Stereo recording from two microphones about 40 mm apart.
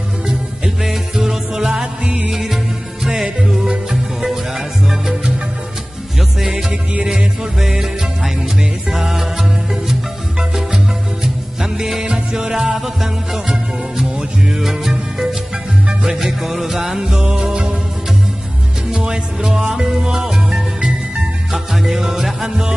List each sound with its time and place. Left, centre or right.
0.8 s music: centre
2.0 s music: right
2.3 s music: centre
6.4 s music: right
8.9 s music: centre
11.6 s music: centre
12.7 s music: centre
14.6 s music: centre
17.1 s music: right
18.9 s music: centre